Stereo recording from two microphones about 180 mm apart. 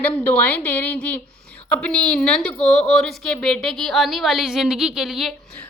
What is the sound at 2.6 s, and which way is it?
Speech, 40° left (ahead or behind).